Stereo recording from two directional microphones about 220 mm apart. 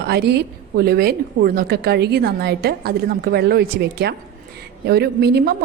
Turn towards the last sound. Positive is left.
turn(degrees=-45)  # may be behind; listen again after turning